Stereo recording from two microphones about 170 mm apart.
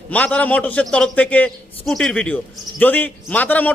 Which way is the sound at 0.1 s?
10° left (ahead or behind).